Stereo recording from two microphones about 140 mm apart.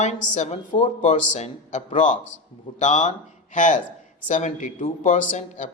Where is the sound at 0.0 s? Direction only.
55° left (ahead or behind).